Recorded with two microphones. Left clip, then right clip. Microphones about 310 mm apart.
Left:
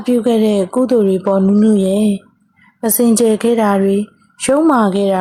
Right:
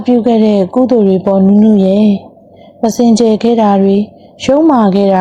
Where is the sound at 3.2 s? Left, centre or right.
Left.